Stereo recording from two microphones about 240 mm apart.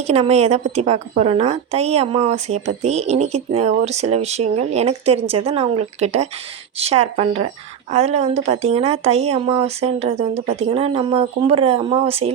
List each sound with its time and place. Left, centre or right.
0.0 s a woman's voice: right